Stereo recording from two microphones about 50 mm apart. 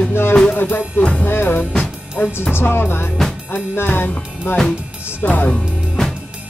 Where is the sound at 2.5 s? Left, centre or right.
Left.